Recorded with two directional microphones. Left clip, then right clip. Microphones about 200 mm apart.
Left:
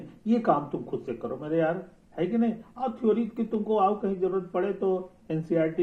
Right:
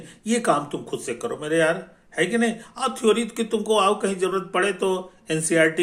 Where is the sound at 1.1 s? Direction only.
50° right (ahead or behind).